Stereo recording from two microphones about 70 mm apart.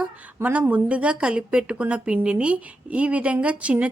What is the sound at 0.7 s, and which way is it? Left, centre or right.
A woman's voice, centre.